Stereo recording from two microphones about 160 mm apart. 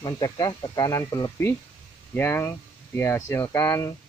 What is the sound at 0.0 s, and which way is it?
Speech, 25° left (ahead or behind).